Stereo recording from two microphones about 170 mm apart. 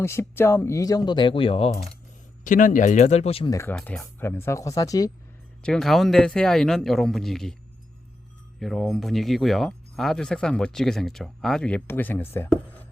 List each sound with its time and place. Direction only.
0.0 s speech: 15° left (ahead or behind); by 1.7 s 35° left (ahead or behind)
2.4 s speech: 50° left (ahead or behind)
3.5 s speech: 15° left (ahead or behind)
5.6 s speech: centre (ahead or behind)
8.5 s speech: centre (ahead or behind)